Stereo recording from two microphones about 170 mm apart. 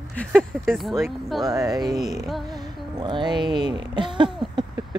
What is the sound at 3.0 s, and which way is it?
Speech, 25° right (ahead or behind).